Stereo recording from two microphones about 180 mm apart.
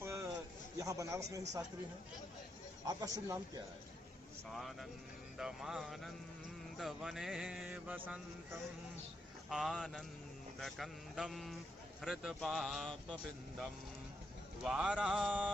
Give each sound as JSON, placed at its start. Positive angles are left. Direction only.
{"t": 0.0, "sound": "a sound", "side_deg": -15}
{"t": 0.8, "sound": "a man's voice", "side_deg": -20}
{"t": 2.8, "sound": "speech", "side_deg": -20}
{"t": 4.5, "sound": "speech", "side_deg": 0}
{"t": 9.5, "sound": "speech", "side_deg": 0}
{"t": 14.6, "sound": "speech", "side_deg": -5}